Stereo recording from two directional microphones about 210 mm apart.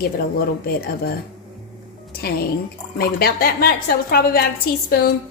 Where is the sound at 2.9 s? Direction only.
50° left (ahead or behind).